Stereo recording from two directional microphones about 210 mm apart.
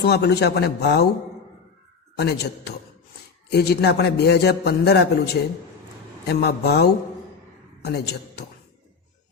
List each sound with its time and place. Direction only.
0.0 s a man's voice: 50° left (ahead or behind)
2.1 s a man's voice: 50° left (ahead or behind)